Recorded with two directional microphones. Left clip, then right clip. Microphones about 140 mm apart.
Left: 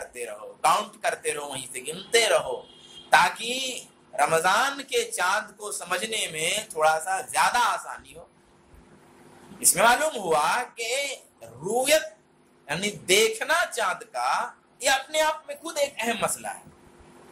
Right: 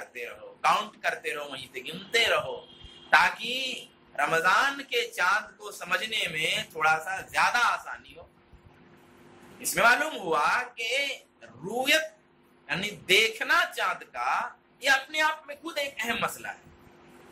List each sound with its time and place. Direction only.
0.1 s a man's voice: 30° left (ahead or behind)
9.6 s speech: 40° left (ahead or behind)